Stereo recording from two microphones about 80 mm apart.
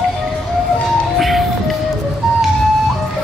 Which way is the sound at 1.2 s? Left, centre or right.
Centre.